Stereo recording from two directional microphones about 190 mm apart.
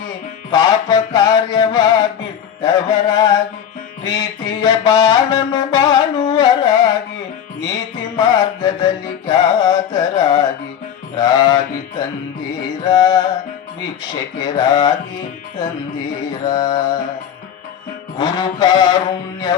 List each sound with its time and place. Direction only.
0.5 s music: 20° left (ahead or behind)
2.6 s speech: 20° left (ahead or behind)
4.0 s music: 20° left (ahead or behind)
14.0 s speech: 20° left (ahead or behind)
16.5 s speech: 20° left (ahead or behind)
18.2 s speech: 20° left (ahead or behind)